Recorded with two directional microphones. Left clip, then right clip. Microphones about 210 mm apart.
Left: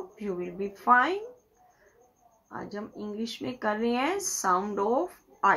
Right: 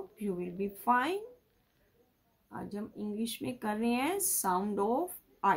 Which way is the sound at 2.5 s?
25° right (ahead or behind).